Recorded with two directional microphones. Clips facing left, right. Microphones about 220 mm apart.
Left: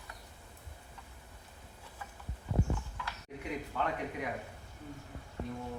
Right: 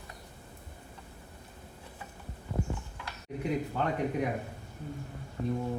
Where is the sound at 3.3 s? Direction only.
35° right (ahead or behind).